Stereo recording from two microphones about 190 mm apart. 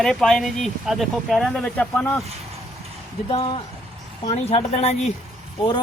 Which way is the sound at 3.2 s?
25° left (ahead or behind).